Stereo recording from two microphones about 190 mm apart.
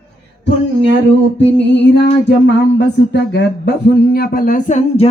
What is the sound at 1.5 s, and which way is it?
Music, 65° left (ahead or behind).